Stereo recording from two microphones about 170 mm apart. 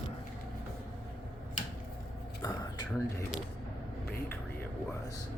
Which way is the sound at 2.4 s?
25° left (ahead or behind).